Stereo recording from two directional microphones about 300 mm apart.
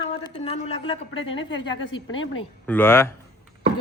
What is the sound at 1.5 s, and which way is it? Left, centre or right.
Speech, left.